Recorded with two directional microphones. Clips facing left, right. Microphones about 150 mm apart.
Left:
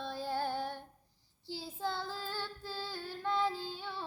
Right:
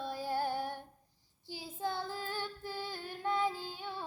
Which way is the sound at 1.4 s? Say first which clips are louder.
Even; 15° right (ahead or behind).